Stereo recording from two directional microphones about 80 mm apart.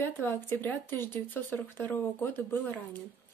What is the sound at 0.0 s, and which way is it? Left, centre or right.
Speech, left.